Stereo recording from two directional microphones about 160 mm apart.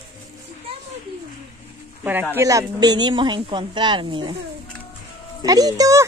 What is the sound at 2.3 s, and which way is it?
Speech, 20° right (ahead or behind).